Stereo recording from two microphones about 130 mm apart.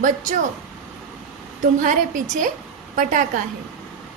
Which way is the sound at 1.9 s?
80° right.